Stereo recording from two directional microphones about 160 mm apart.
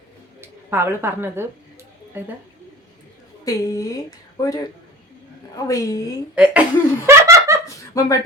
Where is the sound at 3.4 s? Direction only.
20° left (ahead or behind).